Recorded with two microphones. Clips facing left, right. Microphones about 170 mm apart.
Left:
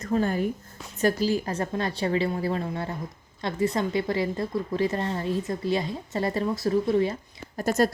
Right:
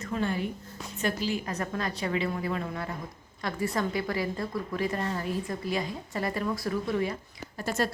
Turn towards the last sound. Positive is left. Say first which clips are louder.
# left 6 dB
turn(degrees=40)  # may be behind; listen again after turning